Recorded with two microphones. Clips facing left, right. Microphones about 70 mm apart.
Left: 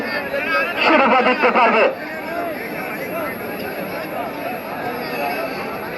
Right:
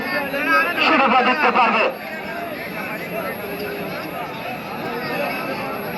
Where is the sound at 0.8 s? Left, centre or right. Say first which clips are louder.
Left 4 dB; left.